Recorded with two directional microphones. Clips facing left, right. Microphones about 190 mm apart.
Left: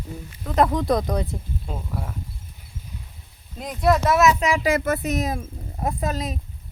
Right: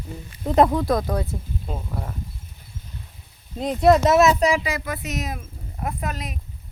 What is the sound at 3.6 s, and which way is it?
Speech, 25° right (ahead or behind).